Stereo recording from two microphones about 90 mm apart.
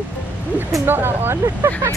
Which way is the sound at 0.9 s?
25° right (ahead or behind).